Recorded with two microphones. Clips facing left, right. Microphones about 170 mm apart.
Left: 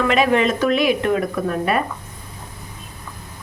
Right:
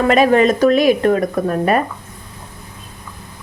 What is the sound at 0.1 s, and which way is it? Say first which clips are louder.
Speech: right 7 dB; 40° right (ahead or behind).